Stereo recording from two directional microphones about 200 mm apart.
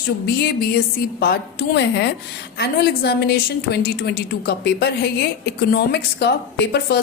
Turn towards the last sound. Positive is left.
turn(degrees=55)  # may be behind; listen again after turning